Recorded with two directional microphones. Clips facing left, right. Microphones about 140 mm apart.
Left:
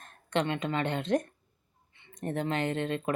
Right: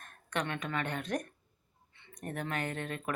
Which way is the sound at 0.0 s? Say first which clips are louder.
Left 6 dB; 25° left (ahead or behind).